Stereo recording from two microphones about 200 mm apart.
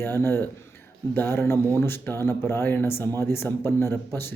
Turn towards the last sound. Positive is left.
turn(degrees=10)  # may be behind; listen again after turning